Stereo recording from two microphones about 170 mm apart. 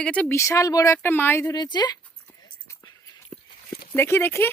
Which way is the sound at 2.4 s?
25° left (ahead or behind).